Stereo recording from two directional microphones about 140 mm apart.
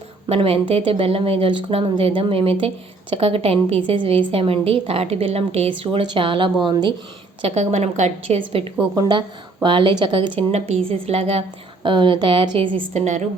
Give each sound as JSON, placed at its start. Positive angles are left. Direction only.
{"t": 0.3, "sound": "a woman's voice", "side_deg": -40}
{"t": 7.4, "sound": "a woman's voice", "side_deg": -50}
{"t": 8.4, "sound": "speech", "side_deg": -40}
{"t": 12.9, "sound": "a woman's voice", "side_deg": -55}